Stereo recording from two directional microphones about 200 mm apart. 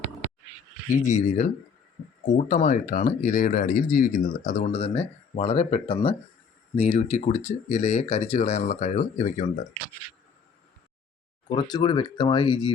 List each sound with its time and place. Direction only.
1.0 s speech: 35° left (ahead or behind)
11.4 s speech: 20° left (ahead or behind)